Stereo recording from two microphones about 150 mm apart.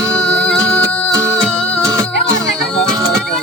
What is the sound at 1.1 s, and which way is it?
Music, 20° right (ahead or behind).